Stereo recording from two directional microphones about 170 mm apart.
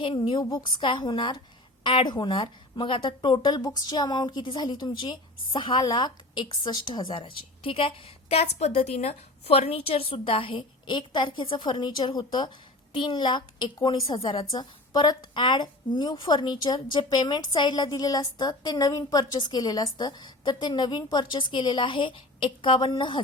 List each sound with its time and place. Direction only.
0.0 s a woman's voice: 30° left (ahead or behind)